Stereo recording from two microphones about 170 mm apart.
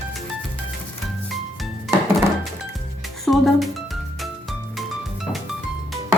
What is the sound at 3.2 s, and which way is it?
Music, centre (ahead or behind).